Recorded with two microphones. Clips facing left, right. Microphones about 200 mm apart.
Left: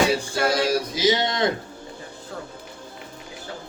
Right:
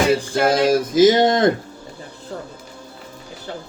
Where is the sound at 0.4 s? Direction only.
50° right (ahead or behind).